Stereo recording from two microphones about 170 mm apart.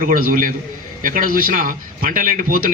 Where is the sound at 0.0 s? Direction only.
55° right (ahead or behind).